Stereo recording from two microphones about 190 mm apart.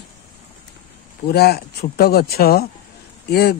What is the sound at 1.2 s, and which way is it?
Speech, 55° left (ahead or behind).